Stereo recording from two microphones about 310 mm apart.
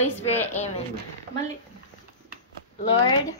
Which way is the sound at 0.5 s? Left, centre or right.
Left.